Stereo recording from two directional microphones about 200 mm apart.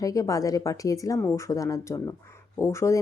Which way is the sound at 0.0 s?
15° left (ahead or behind).